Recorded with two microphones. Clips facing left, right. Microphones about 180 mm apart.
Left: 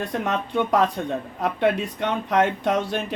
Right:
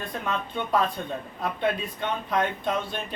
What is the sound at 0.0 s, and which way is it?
Speech, 75° left (ahead or behind).